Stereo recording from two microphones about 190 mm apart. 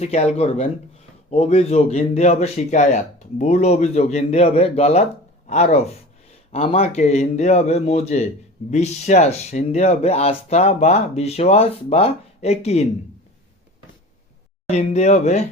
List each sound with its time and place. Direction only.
0.0 s speech: 35° left (ahead or behind)
14.7 s speech: 35° left (ahead or behind)